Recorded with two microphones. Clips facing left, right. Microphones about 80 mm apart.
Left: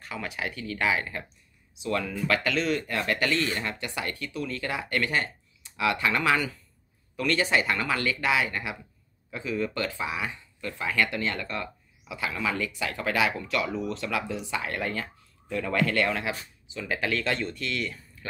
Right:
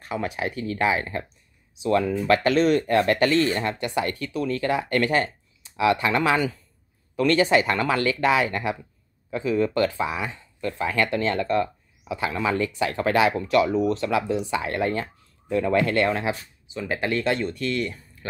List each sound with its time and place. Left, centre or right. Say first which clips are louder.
0.0 s speech: right 6 dB; right
5.8 s speech: right 5 dB; right